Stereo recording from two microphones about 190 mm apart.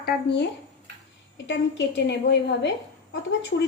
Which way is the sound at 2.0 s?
65° left (ahead or behind).